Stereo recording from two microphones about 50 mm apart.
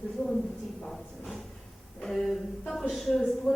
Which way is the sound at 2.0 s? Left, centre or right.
Centre.